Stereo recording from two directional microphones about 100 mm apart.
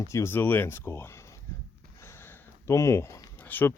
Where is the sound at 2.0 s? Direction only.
25° left (ahead or behind).